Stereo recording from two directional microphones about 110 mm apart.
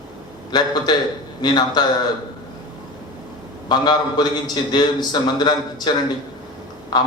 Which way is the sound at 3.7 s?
40° left (ahead or behind).